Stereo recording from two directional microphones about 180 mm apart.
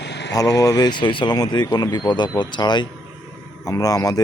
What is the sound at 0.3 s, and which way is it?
Speech, 20° left (ahead or behind).